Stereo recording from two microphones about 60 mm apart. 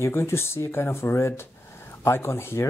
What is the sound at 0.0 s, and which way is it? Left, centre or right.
Speech, left.